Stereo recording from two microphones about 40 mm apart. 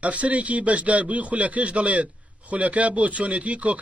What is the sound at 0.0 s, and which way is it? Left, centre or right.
Speech, right.